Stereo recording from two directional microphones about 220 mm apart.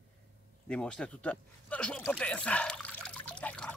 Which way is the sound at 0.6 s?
5° left (ahead or behind).